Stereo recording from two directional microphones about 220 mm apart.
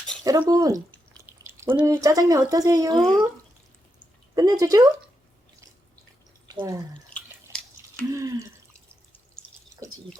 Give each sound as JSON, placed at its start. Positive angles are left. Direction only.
{"t": 0.3, "sound": "speech", "side_deg": -15}
{"t": 2.9, "sound": "speech", "side_deg": 0}
{"t": 4.4, "sound": "speech", "side_deg": -15}
{"t": 6.5, "sound": "speech", "side_deg": -15}
{"t": 7.1, "sound": "drip", "side_deg": 5}
{"t": 8.1, "sound": "speech", "side_deg": -15}
{"t": 9.8, "sound": "a sound", "side_deg": -15}